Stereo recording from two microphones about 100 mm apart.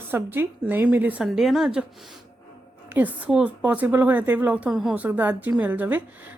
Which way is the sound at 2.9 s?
15° right (ahead or behind).